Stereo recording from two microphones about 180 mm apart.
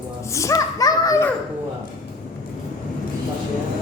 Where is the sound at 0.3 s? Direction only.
20° left (ahead or behind).